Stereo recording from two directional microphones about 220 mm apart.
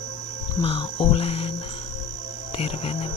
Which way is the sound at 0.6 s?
25° left (ahead or behind).